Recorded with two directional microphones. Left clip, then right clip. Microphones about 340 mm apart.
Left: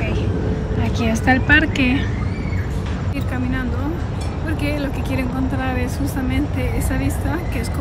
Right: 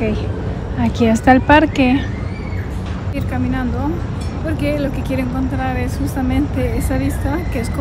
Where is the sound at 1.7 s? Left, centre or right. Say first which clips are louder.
Right 4 dB; centre.